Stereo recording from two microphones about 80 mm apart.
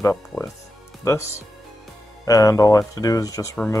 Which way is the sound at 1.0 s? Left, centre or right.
Left.